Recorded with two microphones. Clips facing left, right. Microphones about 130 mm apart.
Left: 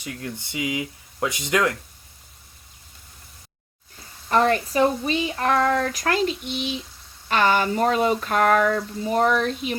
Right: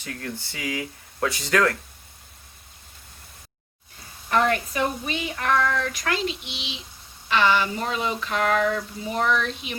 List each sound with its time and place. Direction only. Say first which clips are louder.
0.0 s speech: left 1 dB; 15° left (ahead or behind)
4.3 s speech: left 2 dB; 30° left (ahead or behind)